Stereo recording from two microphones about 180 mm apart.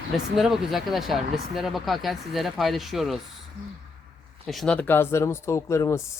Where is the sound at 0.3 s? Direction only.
Centre (ahead or behind).